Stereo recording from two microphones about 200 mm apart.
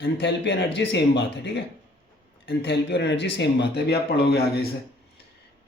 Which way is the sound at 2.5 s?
60° left (ahead or behind).